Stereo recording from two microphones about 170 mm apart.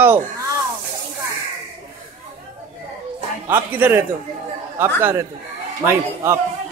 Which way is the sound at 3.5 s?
10° right (ahead or behind).